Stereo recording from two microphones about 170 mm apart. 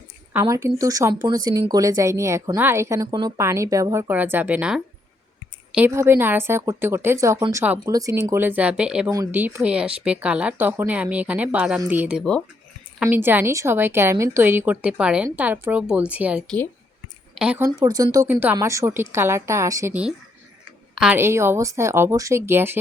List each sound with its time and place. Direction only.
0.3 s a woman's voice: 20° right (ahead or behind)
7.6 s a woman's voice: 10° right (ahead or behind)
9.0 s a woman's voice: 20° right (ahead or behind)
17.7 s a woman's voice: 20° right (ahead or behind)